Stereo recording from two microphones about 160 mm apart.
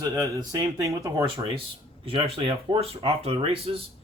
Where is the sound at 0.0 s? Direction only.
20° right (ahead or behind).